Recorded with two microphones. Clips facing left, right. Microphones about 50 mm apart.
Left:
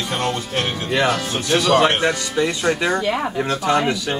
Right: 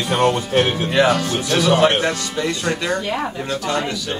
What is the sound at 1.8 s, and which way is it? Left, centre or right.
Speech, centre.